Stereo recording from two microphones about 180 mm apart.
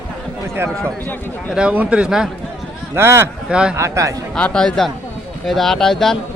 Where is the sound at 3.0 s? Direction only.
15° right (ahead or behind).